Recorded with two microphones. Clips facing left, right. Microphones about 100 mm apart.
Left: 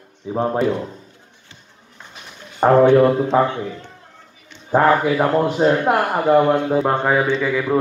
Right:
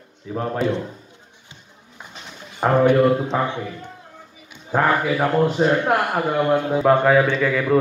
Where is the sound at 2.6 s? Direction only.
15° left (ahead or behind).